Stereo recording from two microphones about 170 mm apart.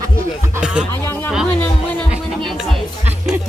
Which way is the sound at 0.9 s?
15° left (ahead or behind).